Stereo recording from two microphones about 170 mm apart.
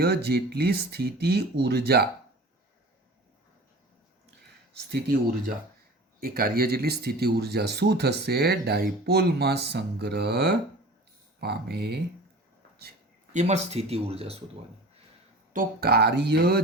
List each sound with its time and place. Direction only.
0.0 s speech: 70° right (ahead or behind)
6.1 s speech: 60° right (ahead or behind)
13.3 s speech: 40° right (ahead or behind)
15.5 s speech: 65° right (ahead or behind)